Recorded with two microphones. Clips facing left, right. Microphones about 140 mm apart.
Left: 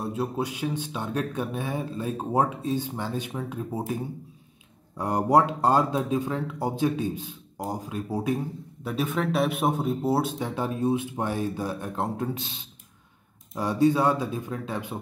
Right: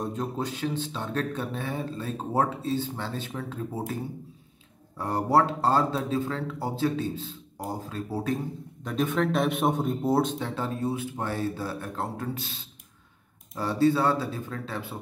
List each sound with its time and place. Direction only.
0.0 s speech: 10° left (ahead or behind)
8.8 s speech: 5° left (ahead or behind)